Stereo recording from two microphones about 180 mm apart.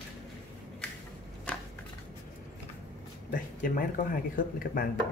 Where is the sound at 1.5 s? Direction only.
5° left (ahead or behind).